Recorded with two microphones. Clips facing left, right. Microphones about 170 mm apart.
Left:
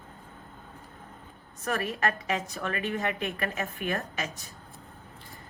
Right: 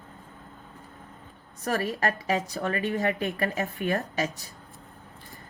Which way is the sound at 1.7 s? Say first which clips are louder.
Right 2 dB; 35° right (ahead or behind).